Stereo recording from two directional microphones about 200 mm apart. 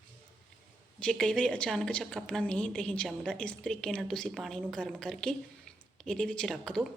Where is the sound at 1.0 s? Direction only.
5° left (ahead or behind).